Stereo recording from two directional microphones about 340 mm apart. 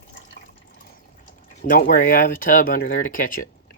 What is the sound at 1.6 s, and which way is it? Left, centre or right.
Speech, left.